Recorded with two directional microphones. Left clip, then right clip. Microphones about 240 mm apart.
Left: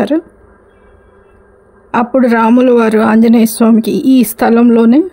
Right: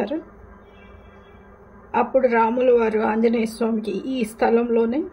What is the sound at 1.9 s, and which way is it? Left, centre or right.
Speech, left.